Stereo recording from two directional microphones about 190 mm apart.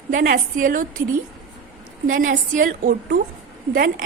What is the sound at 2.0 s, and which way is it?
A woman's voice, 45° right (ahead or behind).